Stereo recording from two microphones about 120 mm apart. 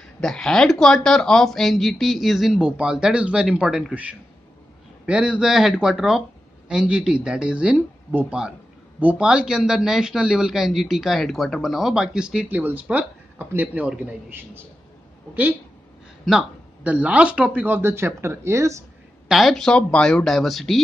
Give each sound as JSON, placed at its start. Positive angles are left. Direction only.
{"t": 0.2, "sound": "speech", "side_deg": 5}
{"t": 16.3, "sound": "speech", "side_deg": -10}
{"t": 19.2, "sound": "speech", "side_deg": 0}